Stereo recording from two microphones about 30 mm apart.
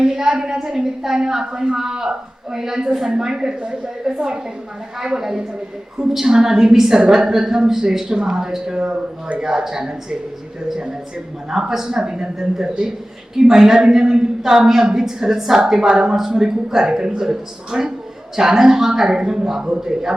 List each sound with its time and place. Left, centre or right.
0.0 s a woman's voice: centre
11.5 s a woman's voice: centre
11.9 s a woman's voice: right
13.3 s a woman's voice: centre
16.1 s a woman's voice: centre